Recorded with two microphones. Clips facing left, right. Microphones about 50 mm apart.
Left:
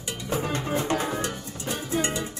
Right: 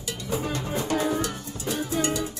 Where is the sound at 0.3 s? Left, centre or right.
Left.